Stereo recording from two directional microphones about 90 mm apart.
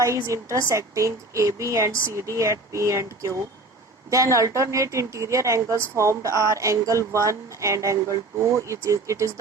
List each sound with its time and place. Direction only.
0.0 s speech: 35° right (ahead or behind)